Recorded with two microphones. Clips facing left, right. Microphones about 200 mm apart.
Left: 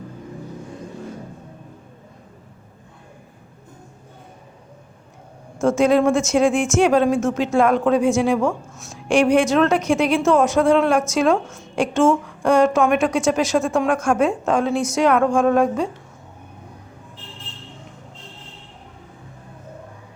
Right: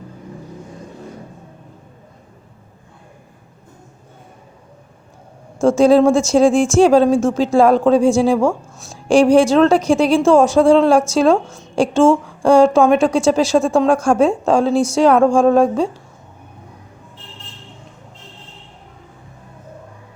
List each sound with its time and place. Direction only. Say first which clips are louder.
5.5 s speech: right 5 dB; 30° right (ahead or behind)